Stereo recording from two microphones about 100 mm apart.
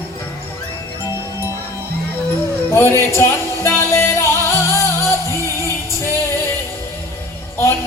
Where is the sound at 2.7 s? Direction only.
25° left (ahead or behind).